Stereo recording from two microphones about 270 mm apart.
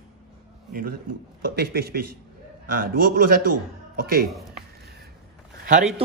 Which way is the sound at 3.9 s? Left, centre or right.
Right.